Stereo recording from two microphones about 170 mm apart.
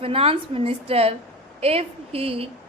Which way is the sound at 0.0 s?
35° right (ahead or behind).